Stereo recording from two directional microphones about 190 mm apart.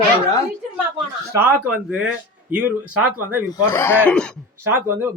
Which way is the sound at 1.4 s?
10° right (ahead or behind).